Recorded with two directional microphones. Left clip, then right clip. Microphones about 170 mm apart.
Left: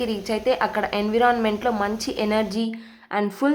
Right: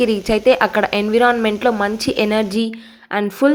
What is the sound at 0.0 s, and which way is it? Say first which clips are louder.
A woman's voice: right 9 dB; 25° right (ahead or behind).